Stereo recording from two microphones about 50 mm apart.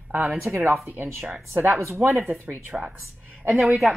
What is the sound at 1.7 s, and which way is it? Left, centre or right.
Speech, right.